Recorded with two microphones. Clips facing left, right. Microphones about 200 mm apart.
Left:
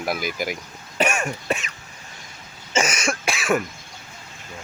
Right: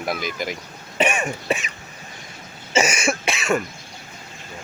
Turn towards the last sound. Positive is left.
turn(degrees=0)  # may be behind; listen again after turning